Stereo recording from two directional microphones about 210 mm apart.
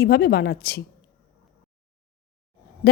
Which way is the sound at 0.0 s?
50° left (ahead or behind).